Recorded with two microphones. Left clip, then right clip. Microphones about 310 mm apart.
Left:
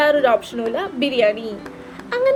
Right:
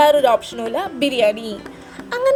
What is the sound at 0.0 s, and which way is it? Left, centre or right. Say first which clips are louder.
Music: right 2 dB; right.